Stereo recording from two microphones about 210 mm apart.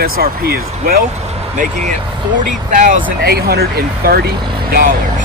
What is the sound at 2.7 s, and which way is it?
Speech, 40° right (ahead or behind).